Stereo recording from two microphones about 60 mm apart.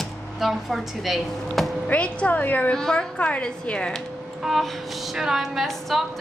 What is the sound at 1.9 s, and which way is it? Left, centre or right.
Speech, left.